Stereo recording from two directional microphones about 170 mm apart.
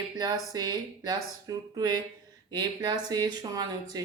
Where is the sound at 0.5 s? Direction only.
25° right (ahead or behind).